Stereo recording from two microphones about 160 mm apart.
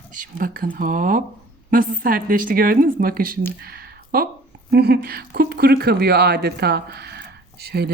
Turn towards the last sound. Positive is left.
turn(degrees=-90)